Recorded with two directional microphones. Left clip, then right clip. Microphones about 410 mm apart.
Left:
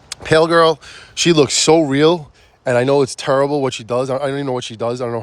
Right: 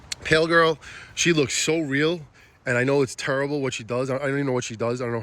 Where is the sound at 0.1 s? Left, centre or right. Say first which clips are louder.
Left 7 dB; centre.